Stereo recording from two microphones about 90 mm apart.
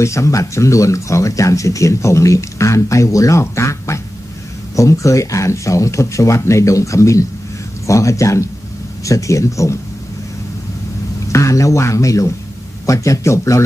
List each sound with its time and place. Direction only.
0.0 s speech: 35° left (ahead or behind)
11.3 s speech: 35° left (ahead or behind)